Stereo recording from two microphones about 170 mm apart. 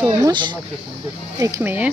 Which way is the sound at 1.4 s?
15° right (ahead or behind).